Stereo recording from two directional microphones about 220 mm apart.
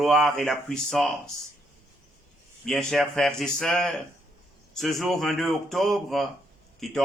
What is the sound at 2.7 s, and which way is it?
Speech, centre (ahead or behind).